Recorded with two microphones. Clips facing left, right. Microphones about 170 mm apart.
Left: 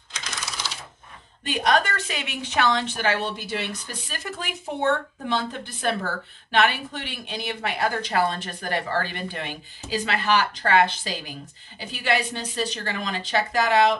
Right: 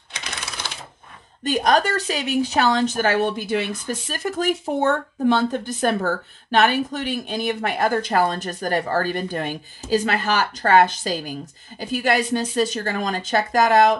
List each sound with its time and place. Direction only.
0.1 s typewriter: 60° right (ahead or behind)
1.4 s speech: 40° right (ahead or behind)